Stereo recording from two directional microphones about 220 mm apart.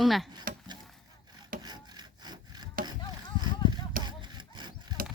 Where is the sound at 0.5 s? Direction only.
40° right (ahead or behind).